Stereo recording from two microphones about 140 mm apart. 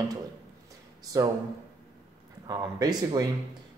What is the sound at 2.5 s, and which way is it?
Speech, 30° right (ahead or behind).